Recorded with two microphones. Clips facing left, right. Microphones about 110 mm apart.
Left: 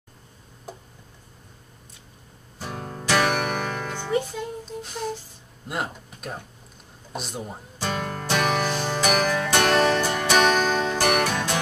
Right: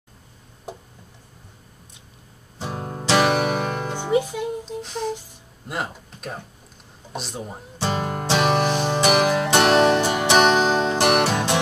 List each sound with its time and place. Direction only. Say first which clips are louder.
2.6 s music: right 3 dB; 25° right (ahead or behind)
4.6 s humming: right 3 dB; centre (ahead or behind)
5.7 s speech: right 1 dB; centre (ahead or behind)
7.1 s speech: right 1 dB; centre (ahead or behind)
7.8 s music: right 4 dB; 25° right (ahead or behind)